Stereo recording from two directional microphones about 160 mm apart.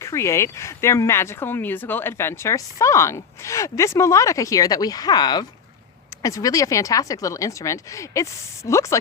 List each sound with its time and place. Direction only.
0.0 s speech: 20° left (ahead or behind)